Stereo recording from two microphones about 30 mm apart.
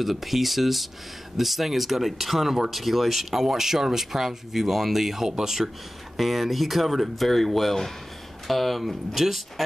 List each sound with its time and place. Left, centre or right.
0.0 s speech: centre
5.6 s speech: right
6.1 s speech: centre